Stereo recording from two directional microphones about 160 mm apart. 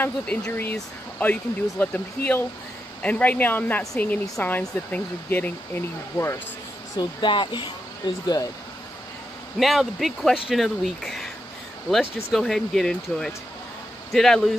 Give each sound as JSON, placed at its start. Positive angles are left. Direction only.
{"t": 0.0, "sound": "speech", "side_deg": 10}
{"t": 7.0, "sound": "speech", "side_deg": 30}
{"t": 9.6, "sound": "speech", "side_deg": 0}